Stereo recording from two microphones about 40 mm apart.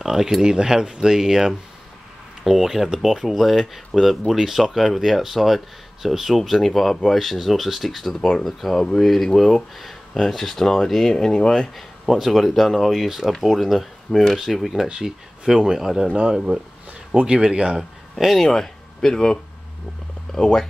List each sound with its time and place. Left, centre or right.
0.0 s speech: centre
11.3 s speech: centre
11.7 s speech: centre
14.9 s speech: centre
18.1 s speech: centre